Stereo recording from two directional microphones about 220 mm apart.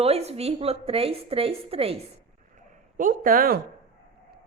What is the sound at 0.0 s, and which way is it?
A woman's voice, 30° right (ahead or behind).